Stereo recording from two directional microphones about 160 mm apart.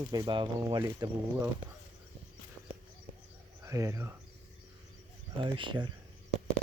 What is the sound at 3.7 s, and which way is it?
Speech, 20° right (ahead or behind).